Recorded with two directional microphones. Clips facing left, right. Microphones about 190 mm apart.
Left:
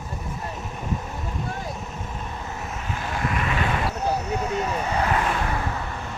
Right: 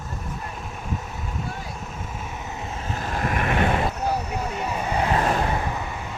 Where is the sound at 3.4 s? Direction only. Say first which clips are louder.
Right 4 dB; 55° right (ahead or behind).